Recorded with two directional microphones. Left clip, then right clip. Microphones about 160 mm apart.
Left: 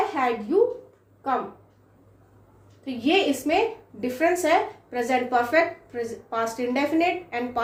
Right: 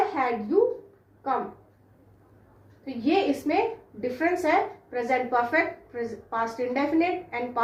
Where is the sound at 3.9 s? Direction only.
65° left (ahead or behind).